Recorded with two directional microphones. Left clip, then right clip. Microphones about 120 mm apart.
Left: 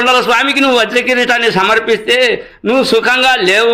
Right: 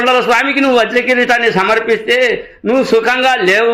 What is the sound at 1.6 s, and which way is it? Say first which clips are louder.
Speech: left 1 dB; 15° left (ahead or behind).